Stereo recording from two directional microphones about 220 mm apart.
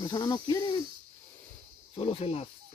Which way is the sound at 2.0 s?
25° left (ahead or behind).